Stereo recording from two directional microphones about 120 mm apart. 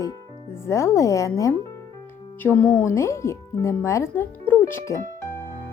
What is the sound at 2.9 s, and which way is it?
Speech, 25° left (ahead or behind).